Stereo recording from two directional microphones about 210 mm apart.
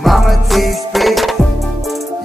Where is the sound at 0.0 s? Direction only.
Centre (ahead or behind).